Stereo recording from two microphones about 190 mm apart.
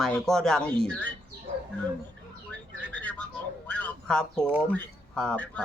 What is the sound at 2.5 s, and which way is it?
Bird, 10° left (ahead or behind).